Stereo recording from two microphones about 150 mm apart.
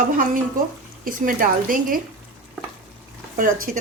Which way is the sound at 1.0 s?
70° right (ahead or behind).